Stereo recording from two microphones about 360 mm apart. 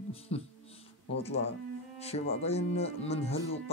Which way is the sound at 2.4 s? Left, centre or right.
Centre.